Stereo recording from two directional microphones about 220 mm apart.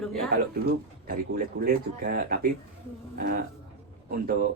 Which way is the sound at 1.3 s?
40° right (ahead or behind).